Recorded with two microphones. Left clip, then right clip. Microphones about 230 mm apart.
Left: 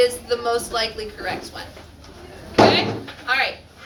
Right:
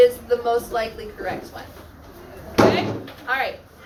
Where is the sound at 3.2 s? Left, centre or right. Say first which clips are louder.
Left 3 dB; left.